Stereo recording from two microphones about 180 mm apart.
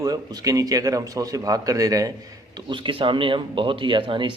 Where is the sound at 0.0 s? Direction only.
20° right (ahead or behind).